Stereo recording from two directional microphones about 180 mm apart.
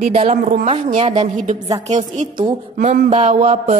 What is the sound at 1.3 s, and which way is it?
A woman's voice, 45° right (ahead or behind).